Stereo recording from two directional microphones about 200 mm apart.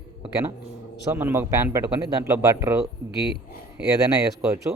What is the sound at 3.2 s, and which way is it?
Speech, 55° right (ahead or behind).